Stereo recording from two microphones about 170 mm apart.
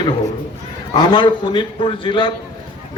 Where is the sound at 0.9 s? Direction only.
25° left (ahead or behind).